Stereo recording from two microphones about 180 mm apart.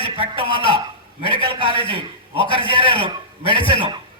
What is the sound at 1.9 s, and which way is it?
A man's voice, 30° left (ahead or behind).